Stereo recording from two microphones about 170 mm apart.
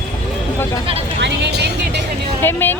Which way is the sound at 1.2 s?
80° right.